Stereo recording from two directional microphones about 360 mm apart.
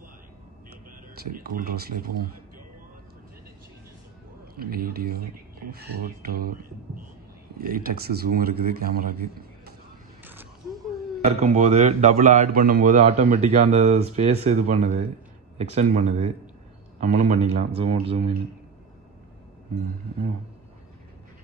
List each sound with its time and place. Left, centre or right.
1.3 s a man's voice: right
4.6 s a man's voice: right
5.2 s speech: right
6.2 s a man's voice: right
7.6 s a man's voice: right
11.2 s a man's voice: centre